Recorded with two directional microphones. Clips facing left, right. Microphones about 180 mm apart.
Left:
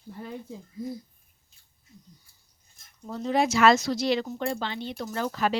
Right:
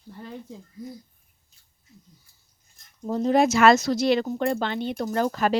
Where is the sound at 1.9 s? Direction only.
Centre (ahead or behind).